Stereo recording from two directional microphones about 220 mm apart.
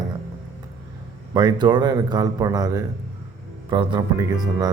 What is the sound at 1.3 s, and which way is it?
Speech, 20° right (ahead or behind).